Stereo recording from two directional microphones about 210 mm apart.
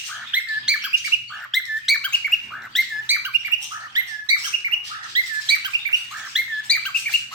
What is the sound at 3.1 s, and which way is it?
Bird, 10° right (ahead or behind).